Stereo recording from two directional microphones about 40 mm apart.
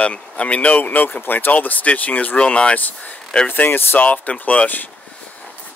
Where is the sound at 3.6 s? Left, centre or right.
Left.